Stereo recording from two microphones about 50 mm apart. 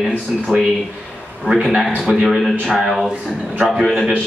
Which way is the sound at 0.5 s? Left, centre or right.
Centre.